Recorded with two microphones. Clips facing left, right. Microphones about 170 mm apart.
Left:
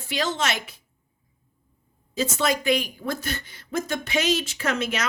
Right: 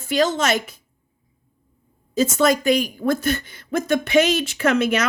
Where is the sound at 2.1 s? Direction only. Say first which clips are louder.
Right 7 dB; 45° right (ahead or behind).